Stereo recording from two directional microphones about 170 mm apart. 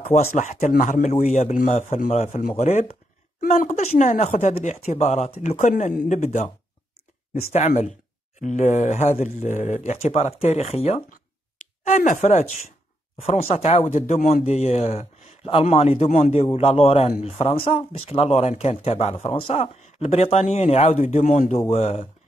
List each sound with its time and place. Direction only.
0.3 s speech: 50° left (ahead or behind)
7.5 s speech: 40° left (ahead or behind)
21.6 s speech: 35° left (ahead or behind)